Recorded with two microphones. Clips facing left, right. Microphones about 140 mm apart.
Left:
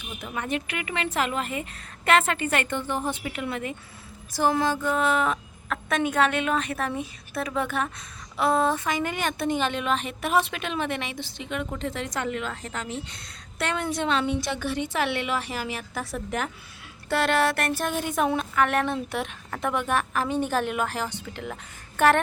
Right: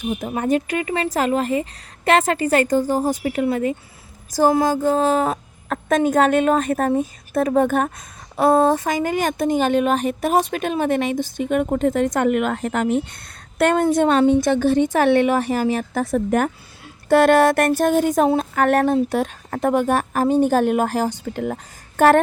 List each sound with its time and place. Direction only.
0.0 s a woman's voice: 40° right (ahead or behind); by 13.1 s 60° right (ahead or behind)
13.6 s a woman's voice: 45° right (ahead or behind)